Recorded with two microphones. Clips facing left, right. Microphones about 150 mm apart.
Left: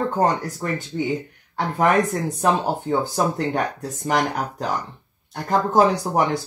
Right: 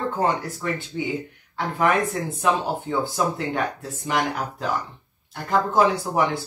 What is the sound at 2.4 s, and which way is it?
Speech, 40° left (ahead or behind).